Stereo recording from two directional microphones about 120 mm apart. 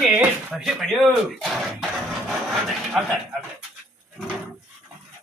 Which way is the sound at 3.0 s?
5° right (ahead or behind).